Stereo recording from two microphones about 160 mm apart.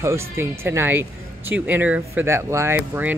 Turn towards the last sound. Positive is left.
turn(degrees=-10)  # may be behind; listen again after turning